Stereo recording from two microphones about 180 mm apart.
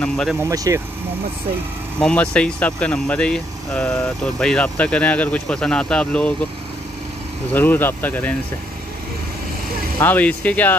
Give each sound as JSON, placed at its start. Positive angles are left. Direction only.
{"t": 0.0, "sound": "speech", "side_deg": 5}
{"t": 0.4, "sound": "speech", "side_deg": -15}
{"t": 2.0, "sound": "speech", "side_deg": 5}
{"t": 7.5, "sound": "speech", "side_deg": 10}
{"t": 9.9, "sound": "speech", "side_deg": 10}